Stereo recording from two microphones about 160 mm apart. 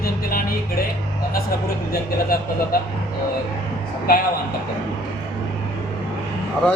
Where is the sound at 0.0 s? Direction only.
65° left (ahead or behind).